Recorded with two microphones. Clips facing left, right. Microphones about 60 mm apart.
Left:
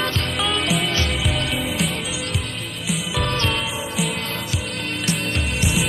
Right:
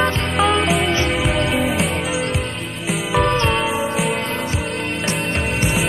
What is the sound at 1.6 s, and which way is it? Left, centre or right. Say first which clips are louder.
Music: right 5 dB; right.